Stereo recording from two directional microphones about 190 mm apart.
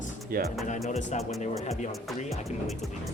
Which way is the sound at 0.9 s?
35° left (ahead or behind).